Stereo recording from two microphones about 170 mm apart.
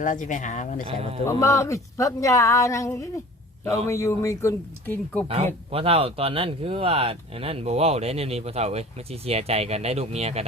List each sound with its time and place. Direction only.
0.0 s speech: 50° left (ahead or behind)
0.9 s speech: 35° right (ahead or behind)
1.3 s speech: 20° left (ahead or behind)
5.7 s speech: 35° right (ahead or behind)